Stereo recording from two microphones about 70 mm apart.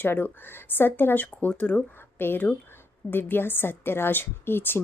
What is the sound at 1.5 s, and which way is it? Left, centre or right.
Speech, centre.